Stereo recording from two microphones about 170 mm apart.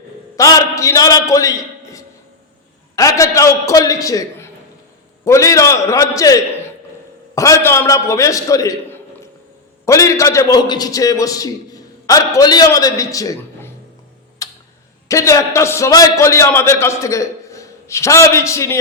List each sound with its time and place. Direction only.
0.3 s a man's voice: 20° left (ahead or behind)
14.4 s tick-tock: 20° left (ahead or behind)
15.0 s a man's voice: 15° left (ahead or behind)